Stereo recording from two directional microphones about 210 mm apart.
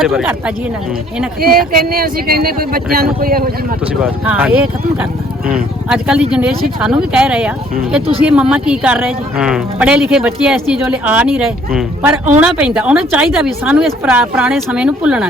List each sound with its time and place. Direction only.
0.0 s a woman's voice: centre (ahead or behind)
1.4 s speech: 45° right (ahead or behind)
4.0 s a woman's voice: 5° right (ahead or behind)